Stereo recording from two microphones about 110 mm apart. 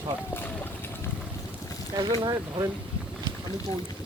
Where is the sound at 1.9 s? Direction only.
40° right (ahead or behind).